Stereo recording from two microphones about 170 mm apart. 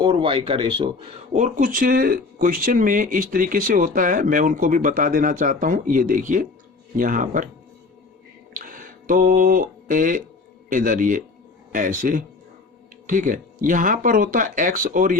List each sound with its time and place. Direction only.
0.0 s speech: 30° right (ahead or behind); by 7.4 s 50° right (ahead or behind)
8.5 s a sound: 55° right (ahead or behind)
10.7 s speech: 50° right (ahead or behind)